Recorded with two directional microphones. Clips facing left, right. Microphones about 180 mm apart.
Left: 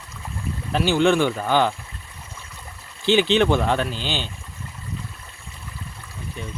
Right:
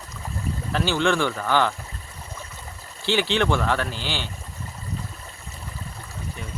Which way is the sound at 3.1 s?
20° left (ahead or behind).